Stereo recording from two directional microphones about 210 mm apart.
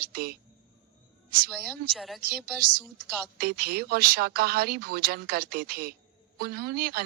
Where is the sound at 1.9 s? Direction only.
Centre (ahead or behind).